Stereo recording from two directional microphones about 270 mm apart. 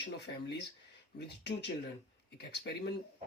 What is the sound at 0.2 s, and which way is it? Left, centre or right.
Speech, left.